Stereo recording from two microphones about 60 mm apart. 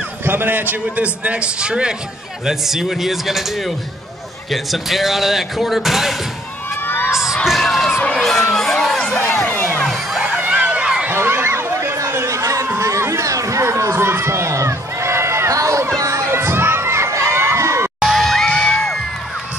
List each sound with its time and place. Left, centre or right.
0.2 s a man's voice: right; by 6.1 s centre
7.1 s crowd: centre
10.4 s a sound: right
11.1 s chatter: right
12.7 s a sound: right
16.0 s children shouting: right
18.0 s bang: centre